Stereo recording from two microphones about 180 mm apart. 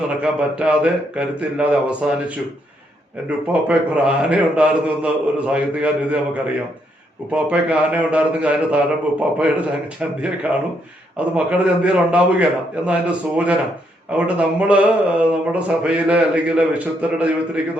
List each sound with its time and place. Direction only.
0.2 s speech: 5° right (ahead or behind)